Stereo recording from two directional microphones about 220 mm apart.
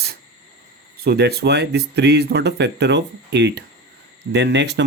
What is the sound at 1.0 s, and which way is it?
Speech, 45° right (ahead or behind).